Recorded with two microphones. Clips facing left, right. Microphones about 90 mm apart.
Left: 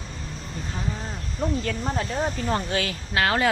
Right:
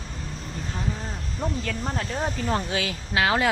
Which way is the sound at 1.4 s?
Centre (ahead or behind).